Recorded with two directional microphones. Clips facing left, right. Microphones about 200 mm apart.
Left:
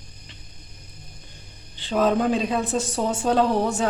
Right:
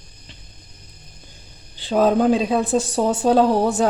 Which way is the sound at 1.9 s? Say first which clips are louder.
Right 4 dB; 35° right (ahead or behind).